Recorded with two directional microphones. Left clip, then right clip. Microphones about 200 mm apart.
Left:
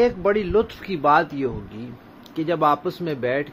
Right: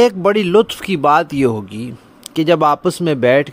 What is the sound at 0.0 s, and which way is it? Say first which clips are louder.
Speech: right 7 dB; 60° right (ahead or behind).